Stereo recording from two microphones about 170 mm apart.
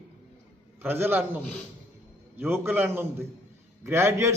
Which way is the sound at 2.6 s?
10° right (ahead or behind).